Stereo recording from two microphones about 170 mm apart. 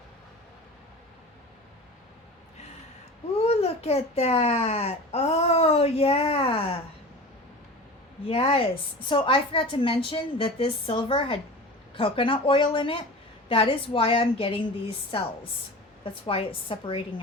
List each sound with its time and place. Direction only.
3.4 s a child's voice: 35° left (ahead or behind)
8.3 s a child's voice: 35° left (ahead or behind)
16.2 s a child's voice: 30° left (ahead or behind)